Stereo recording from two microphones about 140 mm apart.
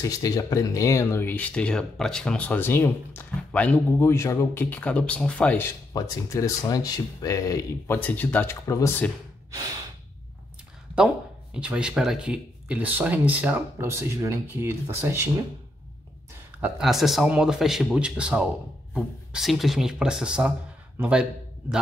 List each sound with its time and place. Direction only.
0.0 s speech: 25° left (ahead or behind)
9.5 s gasp: 25° right (ahead or behind)
11.5 s speech: 5° right (ahead or behind)
16.6 s a man's voice: 5° right (ahead or behind)